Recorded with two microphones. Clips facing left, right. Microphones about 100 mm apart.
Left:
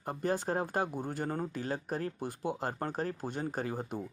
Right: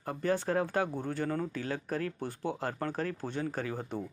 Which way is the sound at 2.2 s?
10° left (ahead or behind).